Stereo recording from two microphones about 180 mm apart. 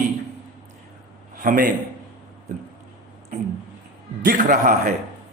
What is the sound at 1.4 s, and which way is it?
Speech, 50° right (ahead or behind).